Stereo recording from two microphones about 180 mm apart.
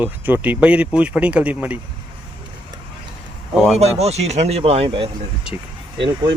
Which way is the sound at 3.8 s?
35° right (ahead or behind).